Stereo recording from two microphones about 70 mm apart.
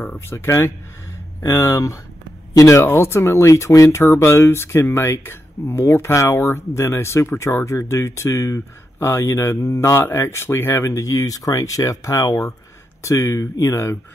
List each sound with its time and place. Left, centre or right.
0.3 s speech: left
1.4 s speech: left
2.9 s speech: left
11.0 s speech: left